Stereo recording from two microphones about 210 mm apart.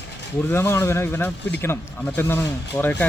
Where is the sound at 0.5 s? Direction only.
10° left (ahead or behind).